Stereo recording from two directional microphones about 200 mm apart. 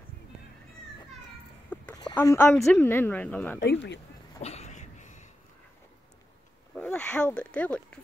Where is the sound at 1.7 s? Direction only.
5° left (ahead or behind).